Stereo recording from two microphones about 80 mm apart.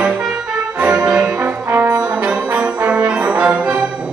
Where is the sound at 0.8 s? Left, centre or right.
Centre.